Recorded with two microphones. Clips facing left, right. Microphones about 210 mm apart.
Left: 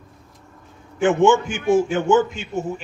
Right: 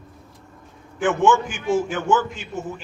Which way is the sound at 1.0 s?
25° left (ahead or behind).